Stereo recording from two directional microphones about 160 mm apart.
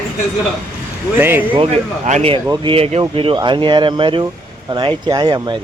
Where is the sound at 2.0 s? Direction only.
45° right (ahead or behind).